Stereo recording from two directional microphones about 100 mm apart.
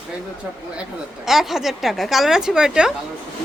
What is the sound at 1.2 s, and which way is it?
Speech, 5° right (ahead or behind).